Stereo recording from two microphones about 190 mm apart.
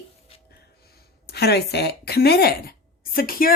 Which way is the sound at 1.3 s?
60° left (ahead or behind).